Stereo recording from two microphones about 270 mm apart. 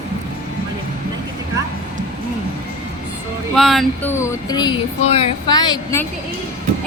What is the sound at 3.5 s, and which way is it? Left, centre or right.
Speech, centre.